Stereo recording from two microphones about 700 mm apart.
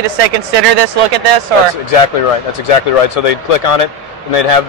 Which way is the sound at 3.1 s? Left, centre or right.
Left.